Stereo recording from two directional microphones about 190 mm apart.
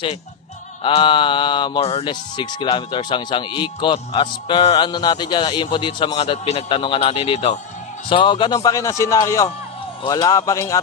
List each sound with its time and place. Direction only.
0.8 s speech: 25° left (ahead or behind)